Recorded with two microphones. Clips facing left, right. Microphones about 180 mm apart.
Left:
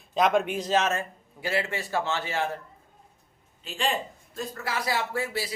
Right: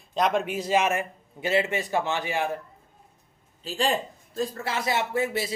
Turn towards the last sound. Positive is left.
turn(degrees=-20)  # may be behind; listen again after turning